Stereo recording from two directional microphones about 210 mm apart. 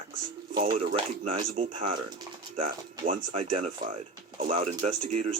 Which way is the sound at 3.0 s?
35° right (ahead or behind).